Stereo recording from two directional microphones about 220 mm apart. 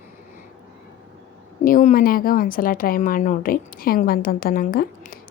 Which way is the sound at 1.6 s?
40° left (ahead or behind).